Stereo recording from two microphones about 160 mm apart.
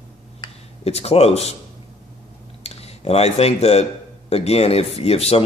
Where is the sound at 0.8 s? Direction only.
40° left (ahead or behind).